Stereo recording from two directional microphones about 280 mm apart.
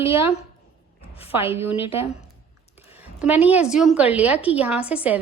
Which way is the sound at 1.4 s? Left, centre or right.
Left.